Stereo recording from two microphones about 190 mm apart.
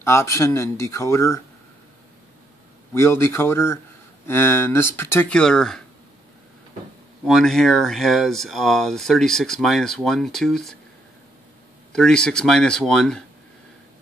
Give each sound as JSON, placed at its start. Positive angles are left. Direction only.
{"t": 0.0, "sound": "speech", "side_deg": 15}
{"t": 2.9, "sound": "speech", "side_deg": 15}
{"t": 7.2, "sound": "speech", "side_deg": 0}
{"t": 11.9, "sound": "speech", "side_deg": 5}